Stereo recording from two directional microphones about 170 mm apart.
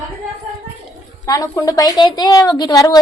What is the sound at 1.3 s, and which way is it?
A woman's voice, 20° left (ahead or behind).